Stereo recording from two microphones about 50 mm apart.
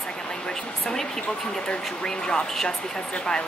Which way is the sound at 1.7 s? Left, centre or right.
Centre.